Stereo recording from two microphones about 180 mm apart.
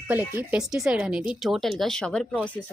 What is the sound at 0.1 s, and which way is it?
A woman's voice, 10° right (ahead or behind).